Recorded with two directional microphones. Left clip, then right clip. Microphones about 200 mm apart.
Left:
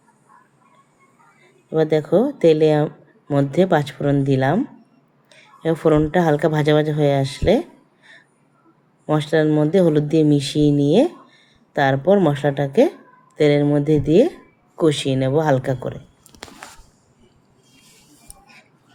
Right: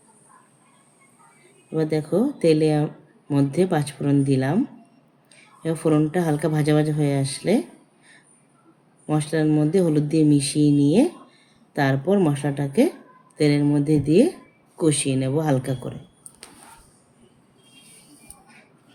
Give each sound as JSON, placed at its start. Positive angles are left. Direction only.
{"t": 1.7, "sound": "a woman's voice", "side_deg": 20}